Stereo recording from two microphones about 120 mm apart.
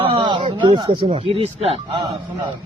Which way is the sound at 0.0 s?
45° right (ahead or behind).